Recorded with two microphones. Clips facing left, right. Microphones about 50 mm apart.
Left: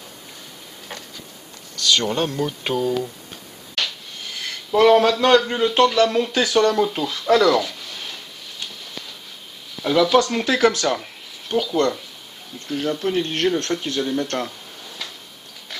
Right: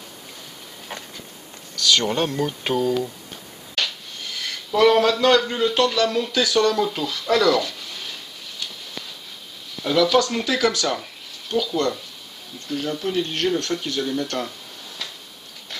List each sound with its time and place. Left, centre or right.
1.8 s speech: centre
4.7 s a sound: left
5.9 s speech: left
6.8 s speech: centre
7.1 s speech: left
9.8 s a sound: left
10.4 s speech: left
12.7 s speech: centre
13.0 s speech: left